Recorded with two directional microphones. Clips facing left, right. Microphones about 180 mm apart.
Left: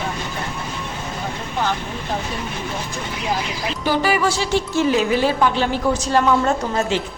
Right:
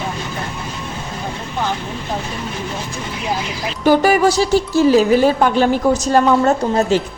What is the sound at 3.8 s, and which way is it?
Speech, 45° right (ahead or behind).